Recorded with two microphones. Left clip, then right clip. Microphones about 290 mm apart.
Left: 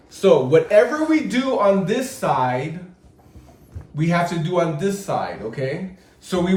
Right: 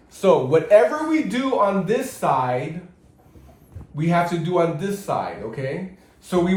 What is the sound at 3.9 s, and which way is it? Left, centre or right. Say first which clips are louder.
A man's voice: even; centre.